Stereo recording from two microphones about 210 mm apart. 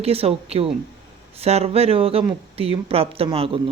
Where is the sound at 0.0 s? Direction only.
30° right (ahead or behind).